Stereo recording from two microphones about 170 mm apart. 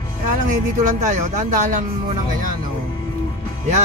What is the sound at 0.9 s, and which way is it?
Speech, 45° right (ahead or behind).